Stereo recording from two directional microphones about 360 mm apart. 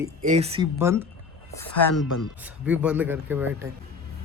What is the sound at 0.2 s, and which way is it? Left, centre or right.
Speech, centre.